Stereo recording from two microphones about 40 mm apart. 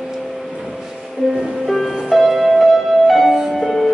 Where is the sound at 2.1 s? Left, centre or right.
Centre.